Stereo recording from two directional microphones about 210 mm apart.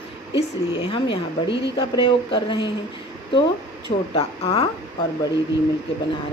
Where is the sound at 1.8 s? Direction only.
25° left (ahead or behind).